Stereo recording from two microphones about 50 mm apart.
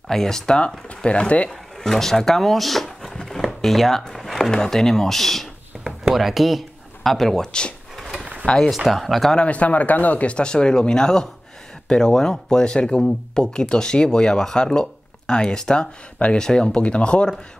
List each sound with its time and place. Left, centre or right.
0.1 s speech: centre
0.8 s speech: left
1.5 s speech: centre
5.9 s a sound: centre
8.0 s drawer open or close: centre
8.7 s speech: centre
9.3 s speech: left